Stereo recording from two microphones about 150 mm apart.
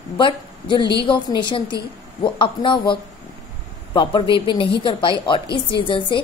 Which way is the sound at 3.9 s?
35° left (ahead or behind).